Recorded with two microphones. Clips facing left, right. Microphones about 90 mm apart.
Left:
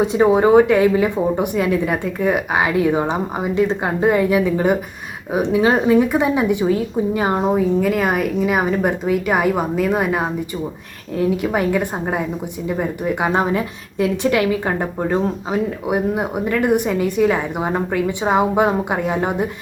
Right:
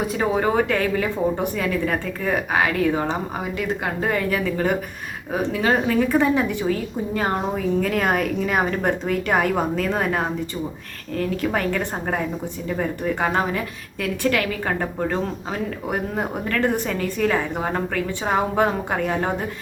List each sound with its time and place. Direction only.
0.0 s a woman's voice: 25° left (ahead or behind)